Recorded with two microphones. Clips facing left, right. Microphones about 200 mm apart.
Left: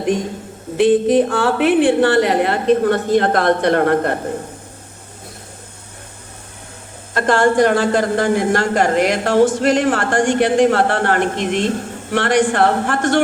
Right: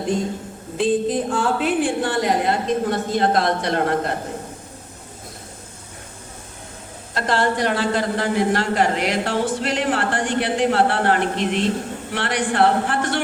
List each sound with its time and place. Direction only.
0.8 s a woman's voice: 70° left (ahead or behind)
7.1 s a man's voice: 50° left (ahead or behind)